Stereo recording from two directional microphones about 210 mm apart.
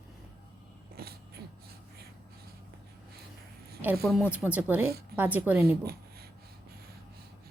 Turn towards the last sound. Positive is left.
turn(degrees=-10)  # may be behind; listen again after turning